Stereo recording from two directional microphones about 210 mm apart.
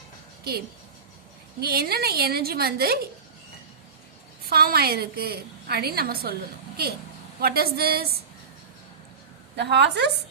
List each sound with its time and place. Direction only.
1.6 s a woman's voice: 45° right (ahead or behind)
4.4 s a woman's voice: 45° right (ahead or behind)
7.3 s a woman's voice: 45° right (ahead or behind)
9.6 s a woman's voice: 55° right (ahead or behind)